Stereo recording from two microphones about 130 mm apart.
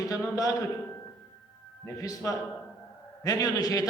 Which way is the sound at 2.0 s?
25° left (ahead or behind).